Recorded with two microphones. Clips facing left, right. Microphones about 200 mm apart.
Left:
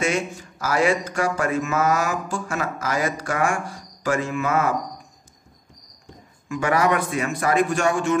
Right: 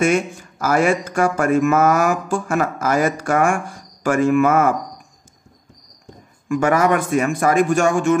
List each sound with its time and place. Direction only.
0.0 s speech: 50° right (ahead or behind)
6.5 s speech: 45° right (ahead or behind)